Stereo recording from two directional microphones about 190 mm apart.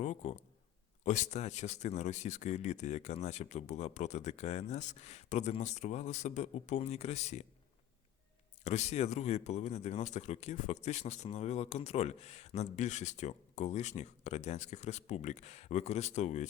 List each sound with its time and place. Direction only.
0.0 s speech: 35° left (ahead or behind)
8.6 s speech: 35° left (ahead or behind)